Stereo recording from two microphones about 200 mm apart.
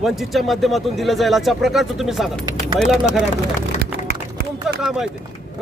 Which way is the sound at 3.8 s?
55° right (ahead or behind).